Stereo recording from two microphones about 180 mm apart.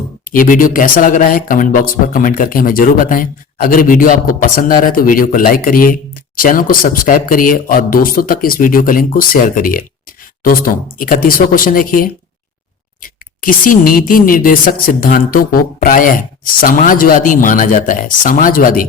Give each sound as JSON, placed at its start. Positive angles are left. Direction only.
{"t": 0.3, "sound": "speech", "side_deg": 50}